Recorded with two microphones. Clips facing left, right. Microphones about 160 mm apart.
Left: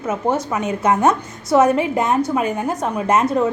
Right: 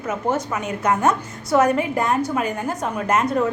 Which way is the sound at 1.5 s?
25° left (ahead or behind).